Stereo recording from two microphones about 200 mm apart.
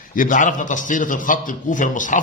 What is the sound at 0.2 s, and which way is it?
A man's voice, 40° left (ahead or behind).